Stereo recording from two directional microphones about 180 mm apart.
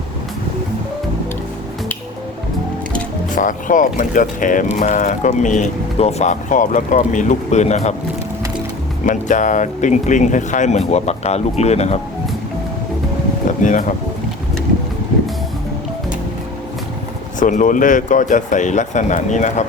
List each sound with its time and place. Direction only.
3.3 s speech: 45° left (ahead or behind)
9.0 s speech: 45° left (ahead or behind)
13.6 s speech: 45° left (ahead or behind)
17.4 s speech: 45° left (ahead or behind)